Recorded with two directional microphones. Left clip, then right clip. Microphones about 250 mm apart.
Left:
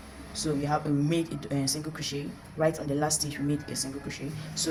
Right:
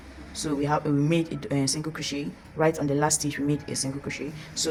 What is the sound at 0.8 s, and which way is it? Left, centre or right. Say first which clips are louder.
Speech: right 3 dB; centre.